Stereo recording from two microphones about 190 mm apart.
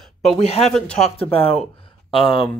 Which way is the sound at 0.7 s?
5° left (ahead or behind).